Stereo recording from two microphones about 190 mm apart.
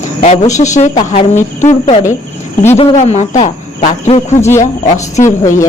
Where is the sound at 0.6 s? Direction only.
40° left (ahead or behind).